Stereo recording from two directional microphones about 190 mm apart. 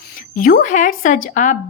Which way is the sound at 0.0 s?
45° left (ahead or behind).